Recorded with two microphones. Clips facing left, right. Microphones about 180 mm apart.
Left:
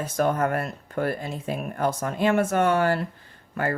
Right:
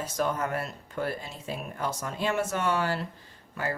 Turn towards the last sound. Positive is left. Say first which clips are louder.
# left 5 dB
turn(degrees=55)  # may be behind; listen again after turning